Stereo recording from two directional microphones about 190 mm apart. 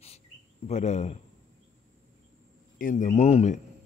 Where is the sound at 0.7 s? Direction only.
35° left (ahead or behind).